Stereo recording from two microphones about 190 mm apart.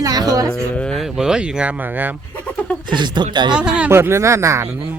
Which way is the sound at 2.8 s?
25° right (ahead or behind).